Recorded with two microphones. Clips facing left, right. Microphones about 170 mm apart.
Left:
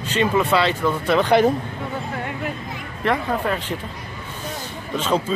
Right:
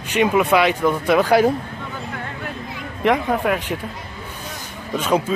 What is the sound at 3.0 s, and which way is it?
Speech, 15° right (ahead or behind).